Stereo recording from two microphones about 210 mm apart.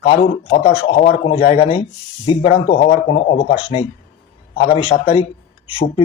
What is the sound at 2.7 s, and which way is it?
Speech, 45° left (ahead or behind).